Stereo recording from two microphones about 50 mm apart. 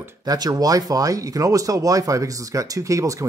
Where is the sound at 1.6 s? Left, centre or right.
Right.